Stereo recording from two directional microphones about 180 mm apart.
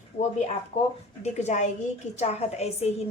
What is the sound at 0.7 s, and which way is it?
Speech, 35° left (ahead or behind).